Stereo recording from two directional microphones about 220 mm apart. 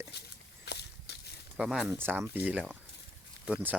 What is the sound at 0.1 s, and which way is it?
Walk, 50° left (ahead or behind).